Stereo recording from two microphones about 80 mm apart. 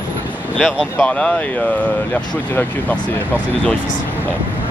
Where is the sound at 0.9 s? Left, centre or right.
Centre.